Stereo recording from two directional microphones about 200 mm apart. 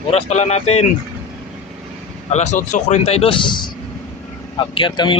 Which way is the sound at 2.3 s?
35° left (ahead or behind).